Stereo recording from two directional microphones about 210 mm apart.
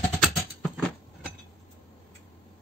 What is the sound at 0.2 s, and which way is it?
Rodents, centre (ahead or behind).